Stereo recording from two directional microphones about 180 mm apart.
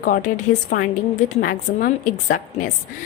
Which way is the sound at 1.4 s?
50° left (ahead or behind).